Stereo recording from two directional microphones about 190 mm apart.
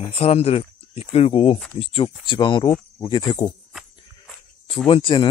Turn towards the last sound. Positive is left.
turn(degrees=25)  # may be behind; listen again after turning